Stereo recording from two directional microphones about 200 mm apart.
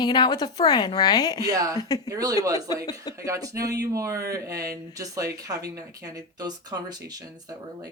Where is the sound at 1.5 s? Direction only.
15° right (ahead or behind).